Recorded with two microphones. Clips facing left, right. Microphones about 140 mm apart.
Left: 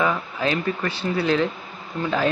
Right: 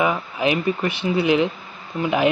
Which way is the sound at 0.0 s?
15° right (ahead or behind).